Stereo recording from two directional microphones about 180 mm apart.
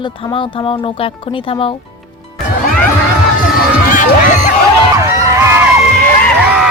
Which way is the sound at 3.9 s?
45° left (ahead or behind).